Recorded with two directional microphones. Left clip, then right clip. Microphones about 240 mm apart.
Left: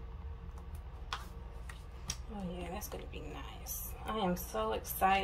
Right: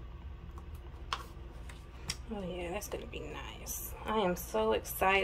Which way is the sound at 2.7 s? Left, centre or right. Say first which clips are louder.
Right 5 dB; centre.